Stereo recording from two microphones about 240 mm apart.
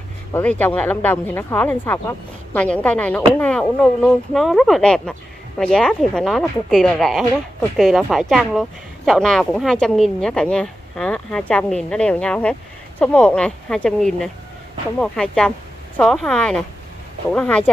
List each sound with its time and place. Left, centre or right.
0.3 s speech: centre